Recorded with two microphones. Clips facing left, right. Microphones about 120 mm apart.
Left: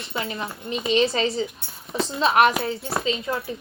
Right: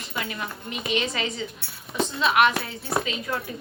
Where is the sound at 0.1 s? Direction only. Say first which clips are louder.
Left 2 dB; 30° left (ahead or behind).